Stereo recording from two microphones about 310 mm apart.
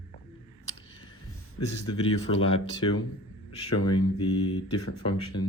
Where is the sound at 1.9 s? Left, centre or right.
Centre.